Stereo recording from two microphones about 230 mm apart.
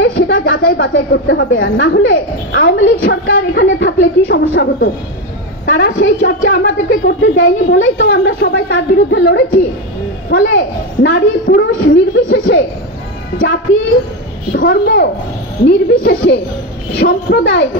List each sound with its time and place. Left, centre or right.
0.0 s a sound: left
0.7 s speech: left
14.5 s speech: left